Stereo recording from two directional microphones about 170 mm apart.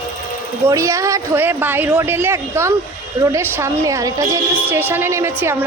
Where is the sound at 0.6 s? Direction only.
20° right (ahead or behind).